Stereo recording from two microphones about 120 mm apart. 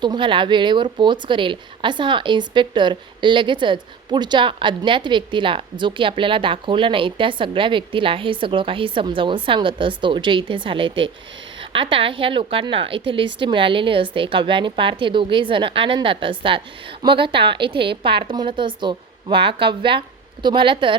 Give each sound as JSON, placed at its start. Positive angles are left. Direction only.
{"t": 0.0, "sound": "a woman's voice", "side_deg": -40}